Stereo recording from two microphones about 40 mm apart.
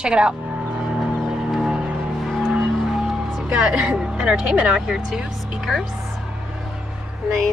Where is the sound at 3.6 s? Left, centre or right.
Centre.